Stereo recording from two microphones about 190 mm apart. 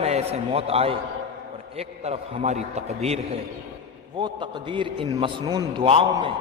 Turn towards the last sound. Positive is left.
turn(degrees=-25)  # may be behind; listen again after turning